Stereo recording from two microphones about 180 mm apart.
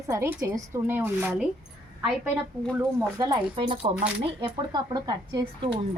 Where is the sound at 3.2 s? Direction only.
25° right (ahead or behind).